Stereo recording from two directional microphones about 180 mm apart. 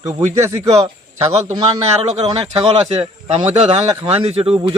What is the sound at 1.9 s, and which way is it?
Speech, 35° right (ahead or behind).